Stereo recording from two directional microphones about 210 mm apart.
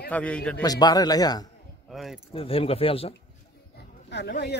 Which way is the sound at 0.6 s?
20° left (ahead or behind).